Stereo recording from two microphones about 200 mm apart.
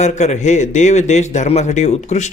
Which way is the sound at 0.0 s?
35° left (ahead or behind).